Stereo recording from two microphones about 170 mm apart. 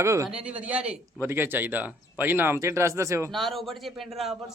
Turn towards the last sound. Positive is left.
turn(degrees=0)  # may be behind; listen again after turning